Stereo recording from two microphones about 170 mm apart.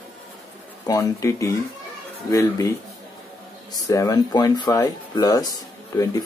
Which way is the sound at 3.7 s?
20° left (ahead or behind).